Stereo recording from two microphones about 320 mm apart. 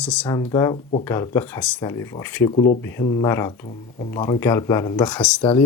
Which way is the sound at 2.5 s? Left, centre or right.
Left.